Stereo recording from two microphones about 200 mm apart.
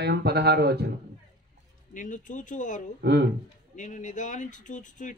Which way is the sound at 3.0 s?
55° right (ahead or behind).